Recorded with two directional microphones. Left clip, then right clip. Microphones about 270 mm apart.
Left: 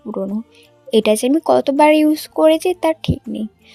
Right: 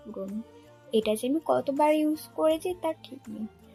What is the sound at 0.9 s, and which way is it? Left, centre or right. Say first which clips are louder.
A woman's voice: left 12 dB; left.